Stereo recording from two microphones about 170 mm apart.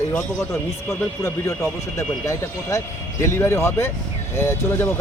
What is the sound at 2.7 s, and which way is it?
Speech, 15° left (ahead or behind).